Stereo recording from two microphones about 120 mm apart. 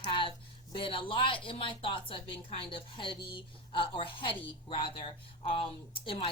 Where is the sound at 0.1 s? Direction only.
45° left (ahead or behind).